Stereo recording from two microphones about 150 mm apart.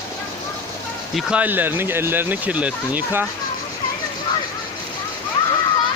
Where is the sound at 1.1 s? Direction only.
10° right (ahead or behind).